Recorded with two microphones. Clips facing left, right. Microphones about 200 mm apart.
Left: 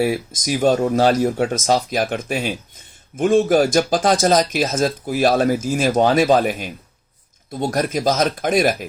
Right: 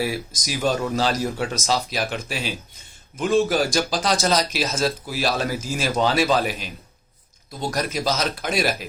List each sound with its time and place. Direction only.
0.4 s speech: 45° left (ahead or behind)